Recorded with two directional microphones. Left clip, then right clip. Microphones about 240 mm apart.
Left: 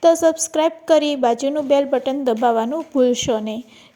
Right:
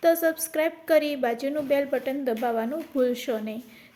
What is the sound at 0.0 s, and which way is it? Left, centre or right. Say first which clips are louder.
A woman's voice: left 8 dB; left.